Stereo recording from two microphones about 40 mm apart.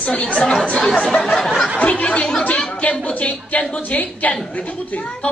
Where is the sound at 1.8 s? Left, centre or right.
Left.